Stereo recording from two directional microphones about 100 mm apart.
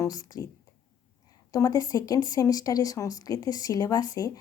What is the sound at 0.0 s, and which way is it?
Speech, 40° left (ahead or behind).